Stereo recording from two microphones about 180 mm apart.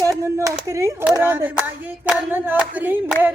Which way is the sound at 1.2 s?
10° right (ahead or behind).